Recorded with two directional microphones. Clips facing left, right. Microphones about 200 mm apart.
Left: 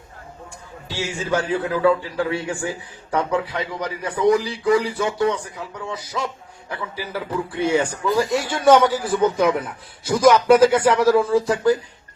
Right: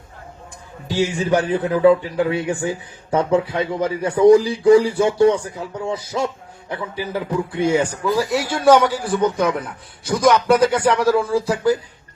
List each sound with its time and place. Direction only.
0.9 s a man's voice: 15° right (ahead or behind); by 11.7 s centre (ahead or behind)